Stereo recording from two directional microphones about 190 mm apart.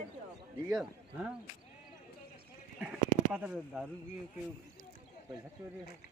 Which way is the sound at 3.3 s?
5° right (ahead or behind).